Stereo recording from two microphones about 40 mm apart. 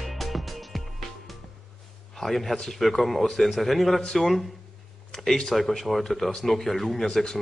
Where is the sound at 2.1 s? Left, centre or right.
Centre.